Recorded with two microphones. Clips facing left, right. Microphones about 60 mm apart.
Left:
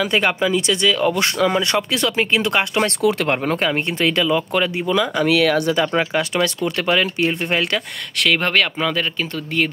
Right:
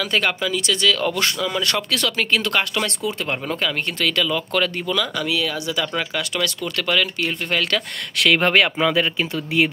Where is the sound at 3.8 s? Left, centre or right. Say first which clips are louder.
Left 3 dB; left.